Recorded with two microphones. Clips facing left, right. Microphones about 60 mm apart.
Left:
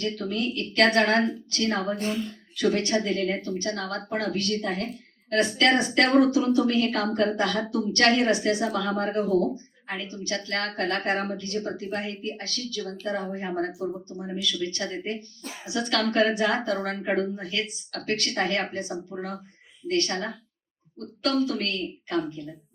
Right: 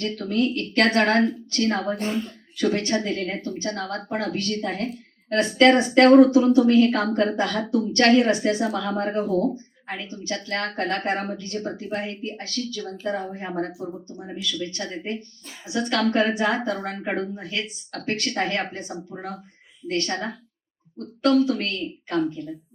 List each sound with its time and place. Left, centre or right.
0.0 s a woman's voice: right